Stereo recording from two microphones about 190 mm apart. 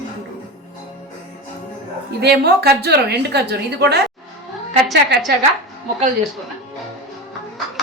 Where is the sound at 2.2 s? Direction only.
60° right (ahead or behind).